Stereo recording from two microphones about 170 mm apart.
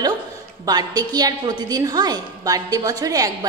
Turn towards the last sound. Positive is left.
turn(degrees=-20)  # may be behind; listen again after turning